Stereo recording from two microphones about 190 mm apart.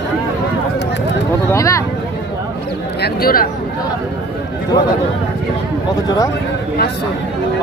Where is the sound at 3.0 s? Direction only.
50° left (ahead or behind).